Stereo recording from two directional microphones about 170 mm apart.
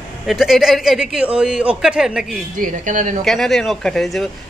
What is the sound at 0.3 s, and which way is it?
A man's voice, centre (ahead or behind).